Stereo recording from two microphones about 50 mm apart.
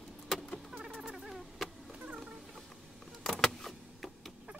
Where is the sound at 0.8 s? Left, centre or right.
Centre.